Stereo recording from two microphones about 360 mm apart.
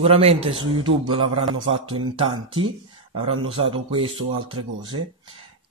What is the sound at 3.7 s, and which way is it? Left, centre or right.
Speech, centre.